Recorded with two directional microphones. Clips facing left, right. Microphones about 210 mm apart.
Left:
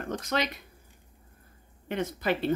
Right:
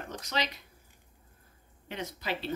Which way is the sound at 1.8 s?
55° left (ahead or behind).